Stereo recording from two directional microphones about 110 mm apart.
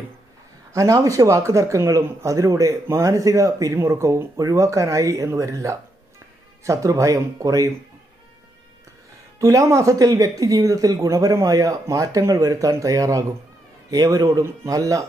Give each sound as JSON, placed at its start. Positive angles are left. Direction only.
{"t": 0.7, "sound": "speech", "side_deg": -30}
{"t": 9.4, "sound": "speech", "side_deg": -30}